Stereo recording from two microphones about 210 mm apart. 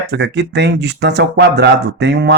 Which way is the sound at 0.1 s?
55° right (ahead or behind).